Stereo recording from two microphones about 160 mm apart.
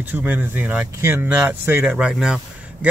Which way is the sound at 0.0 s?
10° right (ahead or behind).